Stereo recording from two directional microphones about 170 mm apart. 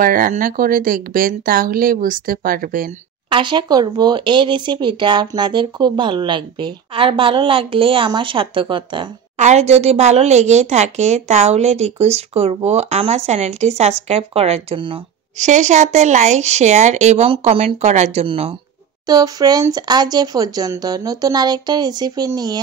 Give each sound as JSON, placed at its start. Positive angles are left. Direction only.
{"t": 0.0, "sound": "speech", "side_deg": -55}
{"t": 3.3, "sound": "speech", "side_deg": -30}
{"t": 9.4, "sound": "a woman's voice", "side_deg": -40}
{"t": 15.3, "sound": "a woman's voice", "side_deg": -45}
{"t": 19.0, "sound": "speech", "side_deg": -20}